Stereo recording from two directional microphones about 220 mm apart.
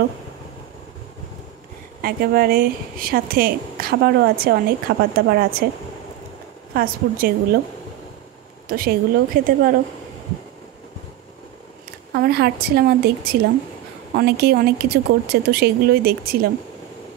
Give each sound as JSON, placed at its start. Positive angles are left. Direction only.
{"t": 2.0, "sound": "speech", "side_deg": -40}
{"t": 6.7, "sound": "a woman's voice", "side_deg": -40}
{"t": 8.6, "sound": "a woman's voice", "side_deg": -40}
{"t": 12.1, "sound": "speech", "side_deg": -45}